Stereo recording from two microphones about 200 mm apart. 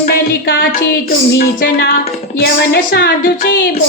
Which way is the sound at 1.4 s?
50° left (ahead or behind).